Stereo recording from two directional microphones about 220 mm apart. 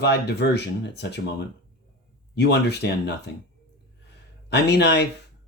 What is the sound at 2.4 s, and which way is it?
Speech, 50° left (ahead or behind).